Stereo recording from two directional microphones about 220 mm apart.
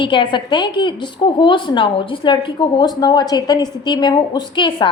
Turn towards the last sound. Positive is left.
turn(degrees=20)  # may be behind; listen again after turning